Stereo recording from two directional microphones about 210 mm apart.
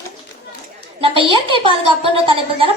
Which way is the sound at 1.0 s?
25° right (ahead or behind).